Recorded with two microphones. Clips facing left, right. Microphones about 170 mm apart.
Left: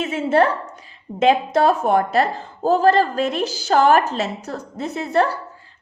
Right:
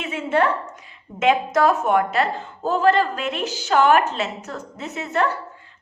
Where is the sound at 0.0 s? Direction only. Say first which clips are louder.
Left 4 dB; 40° left (ahead or behind).